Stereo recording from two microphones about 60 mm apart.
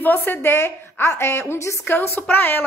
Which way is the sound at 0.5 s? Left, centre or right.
Left.